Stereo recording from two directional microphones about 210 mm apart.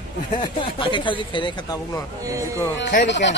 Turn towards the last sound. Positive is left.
turn(degrees=55)  # may be behind; listen again after turning